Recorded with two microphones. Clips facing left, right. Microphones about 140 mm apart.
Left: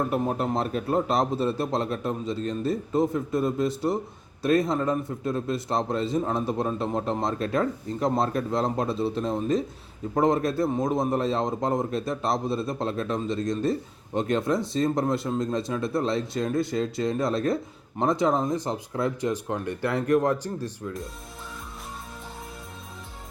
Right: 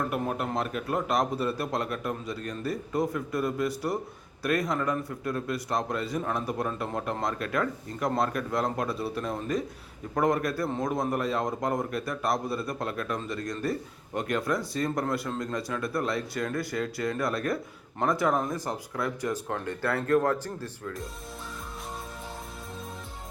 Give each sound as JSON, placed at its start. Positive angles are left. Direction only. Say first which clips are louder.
{"t": 0.0, "sound": "a man's voice", "louder": "left 4 dB", "side_deg": 30}